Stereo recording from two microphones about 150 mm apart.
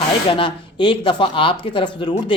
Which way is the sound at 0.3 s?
35° left (ahead or behind).